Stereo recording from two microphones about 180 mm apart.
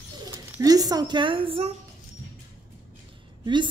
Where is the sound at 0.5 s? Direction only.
20° right (ahead or behind).